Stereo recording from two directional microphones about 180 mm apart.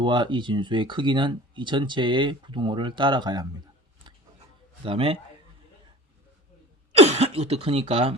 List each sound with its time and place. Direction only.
0.0 s speech: 25° right (ahead or behind)
4.9 s a man's voice: 30° right (ahead or behind)
7.0 s speech: 35° right (ahead or behind)